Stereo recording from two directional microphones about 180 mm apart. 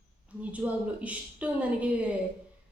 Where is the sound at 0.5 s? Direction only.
10° right (ahead or behind).